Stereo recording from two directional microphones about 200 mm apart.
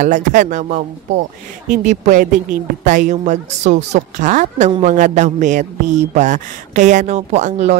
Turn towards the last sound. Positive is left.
turn(degrees=-35)  # may be behind; listen again after turning